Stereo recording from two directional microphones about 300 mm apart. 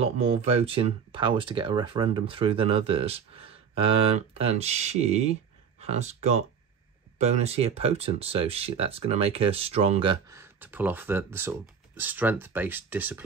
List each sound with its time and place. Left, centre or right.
0.0 s speech: right